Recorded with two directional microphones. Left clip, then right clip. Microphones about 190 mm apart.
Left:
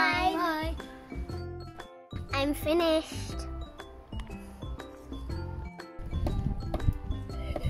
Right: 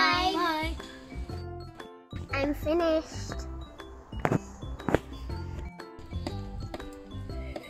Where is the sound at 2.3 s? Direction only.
15° left (ahead or behind).